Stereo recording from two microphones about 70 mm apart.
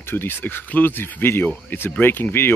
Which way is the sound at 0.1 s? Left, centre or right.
Left.